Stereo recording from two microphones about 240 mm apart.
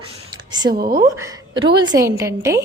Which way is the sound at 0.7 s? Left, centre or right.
Right.